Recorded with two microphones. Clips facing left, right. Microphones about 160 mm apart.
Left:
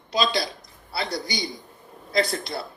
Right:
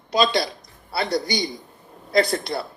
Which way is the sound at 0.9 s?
55° right (ahead or behind).